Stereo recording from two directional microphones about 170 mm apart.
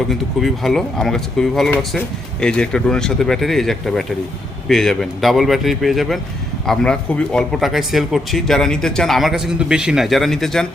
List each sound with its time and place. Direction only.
0.1 s speech: centre (ahead or behind)